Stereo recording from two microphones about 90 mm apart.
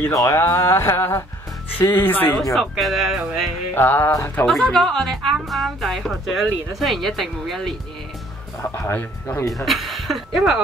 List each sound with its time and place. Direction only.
0.1 s speech: 40° left (ahead or behind)
0.4 s a sound: 30° left (ahead or behind)
2.5 s a woman's voice: centre (ahead or behind)
3.7 s a sound: 20° left (ahead or behind)
4.1 s speech: 35° left (ahead or behind)
4.5 s a woman's voice: 5° left (ahead or behind)
9.5 s a woman's voice: centre (ahead or behind)